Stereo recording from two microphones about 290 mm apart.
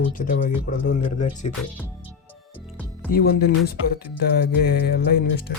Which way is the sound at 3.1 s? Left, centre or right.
Left.